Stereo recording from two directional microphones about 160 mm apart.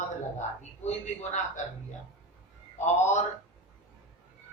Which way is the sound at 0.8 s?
45° left (ahead or behind).